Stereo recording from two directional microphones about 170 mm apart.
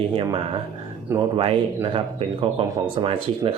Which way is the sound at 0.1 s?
30° right (ahead or behind).